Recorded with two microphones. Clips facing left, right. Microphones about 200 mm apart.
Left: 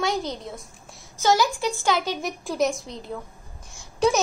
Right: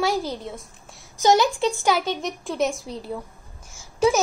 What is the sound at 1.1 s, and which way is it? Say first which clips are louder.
Speech: right 3 dB; 15° right (ahead or behind).